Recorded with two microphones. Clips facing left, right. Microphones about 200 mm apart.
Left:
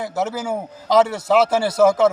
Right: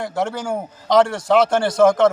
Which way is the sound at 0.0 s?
5° left (ahead or behind).